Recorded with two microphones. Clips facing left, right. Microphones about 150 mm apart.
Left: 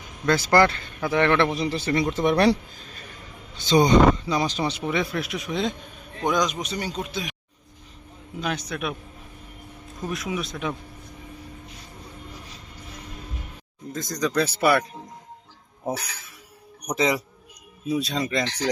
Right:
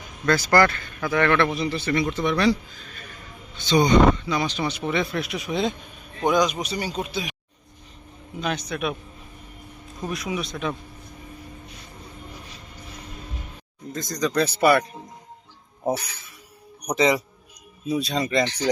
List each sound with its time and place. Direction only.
0.3 s speech: 25° left (ahead or behind)
1.5 s speech: 35° left (ahead or behind)
3.7 s speech: 35° left (ahead or behind)
4.8 s speech: 10° left (ahead or behind)
8.4 s speech: centre (ahead or behind)
10.1 s speech: centre (ahead or behind)
13.9 s speech: 5° left (ahead or behind)
16.9 s speech: centre (ahead or behind)